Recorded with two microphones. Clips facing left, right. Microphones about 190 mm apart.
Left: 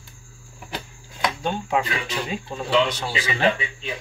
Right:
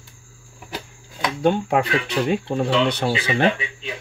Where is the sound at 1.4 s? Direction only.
65° right (ahead or behind).